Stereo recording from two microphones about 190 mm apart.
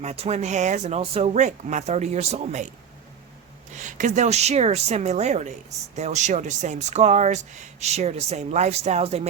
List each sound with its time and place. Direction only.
0.0 s speech: 35° right (ahead or behind)
3.8 s speech: 40° right (ahead or behind)